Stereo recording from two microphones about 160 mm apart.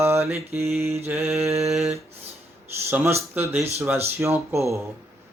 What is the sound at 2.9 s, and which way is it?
Speech, 15° right (ahead or behind).